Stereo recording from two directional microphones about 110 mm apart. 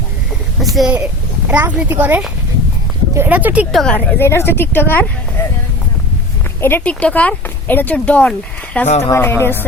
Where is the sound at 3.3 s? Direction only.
15° right (ahead or behind).